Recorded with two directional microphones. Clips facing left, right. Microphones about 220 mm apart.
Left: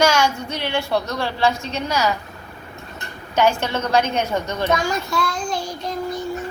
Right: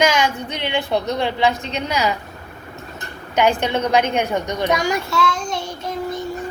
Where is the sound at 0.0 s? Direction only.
15° right (ahead or behind).